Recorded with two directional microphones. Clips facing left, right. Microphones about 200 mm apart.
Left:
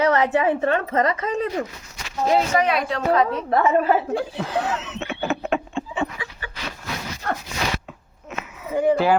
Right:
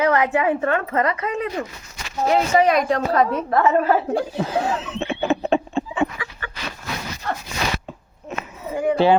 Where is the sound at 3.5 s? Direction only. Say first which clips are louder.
Left 1 dB; 20° left (ahead or behind).